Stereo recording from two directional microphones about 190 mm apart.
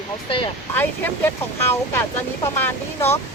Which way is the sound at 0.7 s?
10° left (ahead or behind).